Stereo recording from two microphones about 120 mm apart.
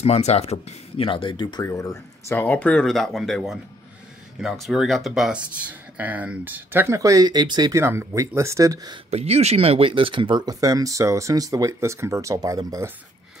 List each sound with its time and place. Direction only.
0.0 s speech: 60° left (ahead or behind); by 1.7 s 40° left (ahead or behind)
1.7 s speech: 25° left (ahead or behind)
2.3 s speech: 15° left (ahead or behind); by 5.4 s centre (ahead or behind)
5.7 s speech: 15° right (ahead or behind)
7.0 s speech: 30° right (ahead or behind)
7.8 s speech: 20° right (ahead or behind)
9.1 s speech: 60° right (ahead or behind); by 12.9 s 30° right (ahead or behind)